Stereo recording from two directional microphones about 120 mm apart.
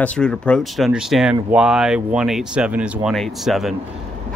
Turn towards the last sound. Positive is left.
turn(degrees=0)  # may be behind; listen again after turning